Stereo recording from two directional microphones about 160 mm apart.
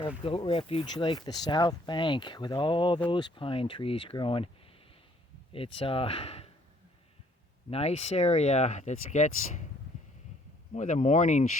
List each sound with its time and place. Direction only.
0.3 s speech: 35° left (ahead or behind)
5.5 s speech: 35° left (ahead or behind)
7.7 s speech: 40° left (ahead or behind)
10.8 s speech: 50° left (ahead or behind)